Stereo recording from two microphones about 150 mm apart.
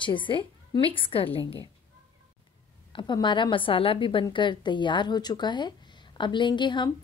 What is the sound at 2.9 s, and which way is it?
A woman's voice, 30° left (ahead or behind).